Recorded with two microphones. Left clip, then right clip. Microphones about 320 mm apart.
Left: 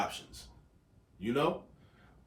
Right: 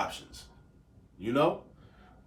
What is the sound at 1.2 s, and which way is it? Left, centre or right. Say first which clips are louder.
Speech: right 4 dB; centre.